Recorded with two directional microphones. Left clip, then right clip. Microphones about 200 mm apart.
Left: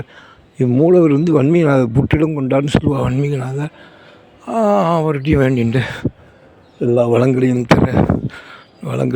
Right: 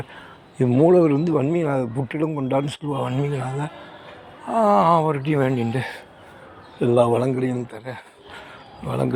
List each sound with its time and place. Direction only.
0.5 s speech: 40° left (ahead or behind); by 9.1 s 55° left (ahead or behind)